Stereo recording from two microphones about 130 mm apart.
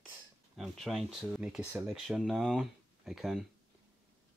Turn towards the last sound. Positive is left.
turn(degrees=0)  # may be behind; listen again after turning